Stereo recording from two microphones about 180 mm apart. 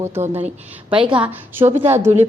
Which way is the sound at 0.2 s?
40° right (ahead or behind).